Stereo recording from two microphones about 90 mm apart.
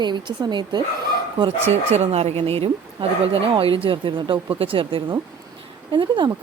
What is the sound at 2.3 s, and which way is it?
Speech, 90° right.